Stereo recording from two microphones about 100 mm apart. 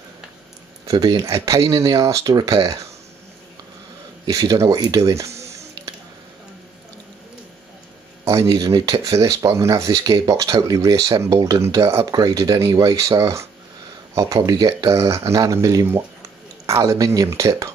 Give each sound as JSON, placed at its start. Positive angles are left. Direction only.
{"t": 0.9, "sound": "speech", "side_deg": -40}
{"t": 4.3, "sound": "speech", "side_deg": -35}
{"t": 5.3, "sound": "music", "side_deg": -90}
{"t": 8.3, "sound": "speech", "side_deg": -30}